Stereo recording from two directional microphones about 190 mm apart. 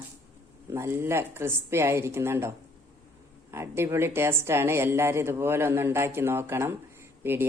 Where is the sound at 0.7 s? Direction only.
15° right (ahead or behind).